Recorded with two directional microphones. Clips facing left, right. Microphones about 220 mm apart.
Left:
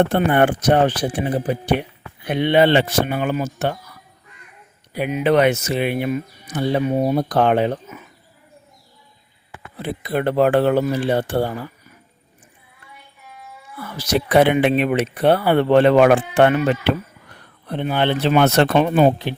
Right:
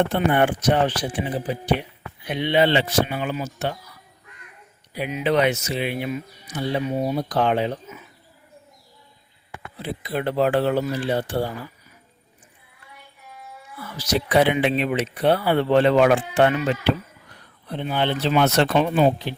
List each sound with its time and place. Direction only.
0.1 s speech: 55° left (ahead or behind)
4.9 s speech: 55° left (ahead or behind)
9.7 s speech: 55° left (ahead or behind)
13.7 s speech: 55° left (ahead or behind)